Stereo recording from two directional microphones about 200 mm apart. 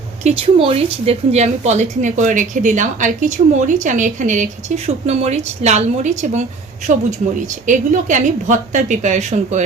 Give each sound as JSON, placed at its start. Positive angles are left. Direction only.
{"t": 0.3, "sound": "a woman's voice", "side_deg": -30}